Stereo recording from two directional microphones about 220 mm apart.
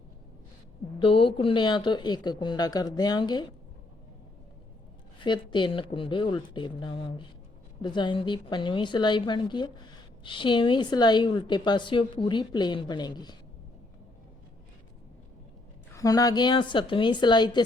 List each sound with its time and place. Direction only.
0.9 s a woman's voice: 25° left (ahead or behind)
5.2 s a woman's voice: 20° left (ahead or behind)
15.9 s a woman's voice: 15° left (ahead or behind)